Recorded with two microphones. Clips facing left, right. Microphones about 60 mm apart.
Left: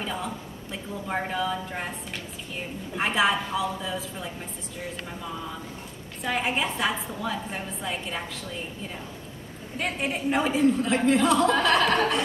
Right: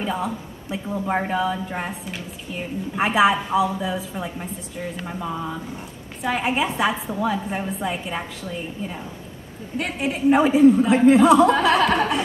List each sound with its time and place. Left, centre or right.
0.0 s a woman's voice: centre
6.2 s a woman's voice: centre
9.8 s speech: centre